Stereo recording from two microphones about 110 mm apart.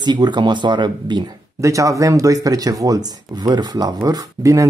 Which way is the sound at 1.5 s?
30° right (ahead or behind).